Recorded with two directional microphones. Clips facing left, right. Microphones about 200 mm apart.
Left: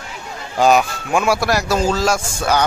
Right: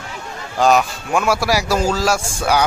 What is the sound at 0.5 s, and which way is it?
A man's voice, centre (ahead or behind).